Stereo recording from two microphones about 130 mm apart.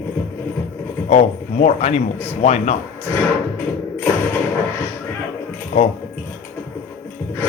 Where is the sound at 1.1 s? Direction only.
60° left (ahead or behind).